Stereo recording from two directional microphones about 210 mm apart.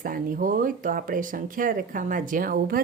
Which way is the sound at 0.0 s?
40° right (ahead or behind).